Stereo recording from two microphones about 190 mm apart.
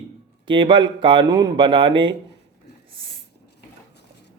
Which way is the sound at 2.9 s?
25° right (ahead or behind).